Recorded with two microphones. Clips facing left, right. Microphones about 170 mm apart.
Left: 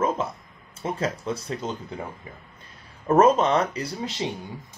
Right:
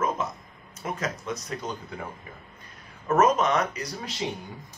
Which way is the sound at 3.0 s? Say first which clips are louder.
Left 4 dB; 30° left (ahead or behind).